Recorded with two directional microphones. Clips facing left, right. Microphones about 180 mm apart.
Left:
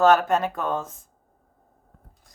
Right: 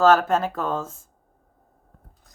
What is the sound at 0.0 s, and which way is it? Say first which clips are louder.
Speech: right 1 dB; 20° left (ahead or behind).